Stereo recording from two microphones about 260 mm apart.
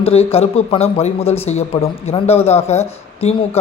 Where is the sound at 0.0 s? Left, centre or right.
Left.